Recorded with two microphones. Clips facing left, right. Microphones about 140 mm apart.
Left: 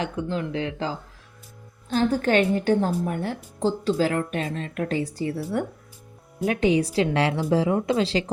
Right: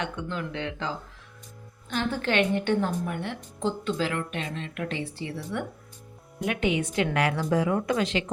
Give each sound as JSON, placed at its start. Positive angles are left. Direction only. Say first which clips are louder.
{"t": 0.0, "sound": "a woman's voice", "louder": "left 5 dB", "side_deg": 35}